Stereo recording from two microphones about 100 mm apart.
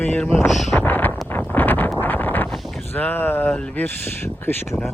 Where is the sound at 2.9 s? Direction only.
20° left (ahead or behind).